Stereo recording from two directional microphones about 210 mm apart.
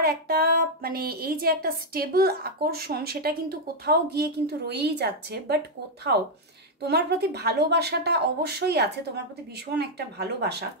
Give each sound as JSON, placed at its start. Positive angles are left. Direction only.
{"t": 0.0, "sound": "speech", "side_deg": -45}
{"t": 6.8, "sound": "speech", "side_deg": -50}